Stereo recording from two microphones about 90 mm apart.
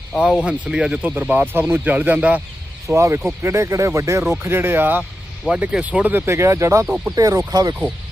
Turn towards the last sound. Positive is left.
turn(degrees=-45)  # may be behind; listen again after turning